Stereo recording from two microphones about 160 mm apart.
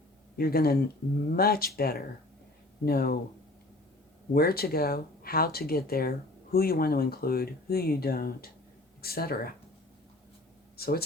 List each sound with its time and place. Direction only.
0.3 s speech: 70° left (ahead or behind)
4.3 s speech: 70° left (ahead or behind)
10.8 s speech: 75° left (ahead or behind)